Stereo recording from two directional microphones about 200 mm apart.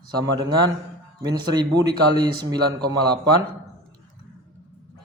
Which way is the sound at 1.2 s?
20° right (ahead or behind).